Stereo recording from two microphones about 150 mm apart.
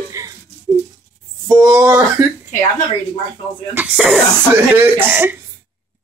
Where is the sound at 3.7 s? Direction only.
5° right (ahead or behind).